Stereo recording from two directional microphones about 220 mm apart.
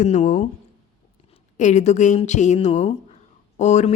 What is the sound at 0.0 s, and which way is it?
Speech, 35° left (ahead or behind).